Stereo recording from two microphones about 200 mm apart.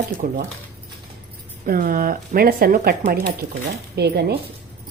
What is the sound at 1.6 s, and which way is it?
Speech, 45° right (ahead or behind).